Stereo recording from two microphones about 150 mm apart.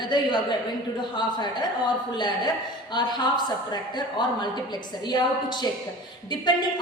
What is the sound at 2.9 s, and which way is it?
A woman's voice, 30° left (ahead or behind).